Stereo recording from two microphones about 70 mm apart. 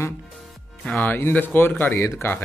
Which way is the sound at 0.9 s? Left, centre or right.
Left.